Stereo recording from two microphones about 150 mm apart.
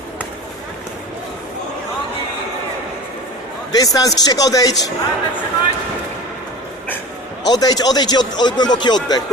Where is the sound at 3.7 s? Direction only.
25° left (ahead or behind).